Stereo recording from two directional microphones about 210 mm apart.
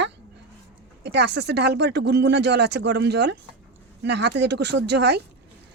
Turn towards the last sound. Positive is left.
turn(degrees=-55)  # may be behind; listen again after turning